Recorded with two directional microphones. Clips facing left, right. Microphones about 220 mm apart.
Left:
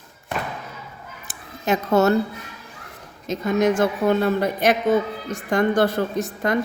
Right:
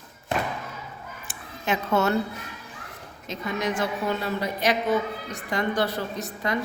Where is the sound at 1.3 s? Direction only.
40° left (ahead or behind).